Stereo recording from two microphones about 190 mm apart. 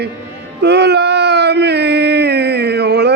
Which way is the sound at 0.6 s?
60° right (ahead or behind).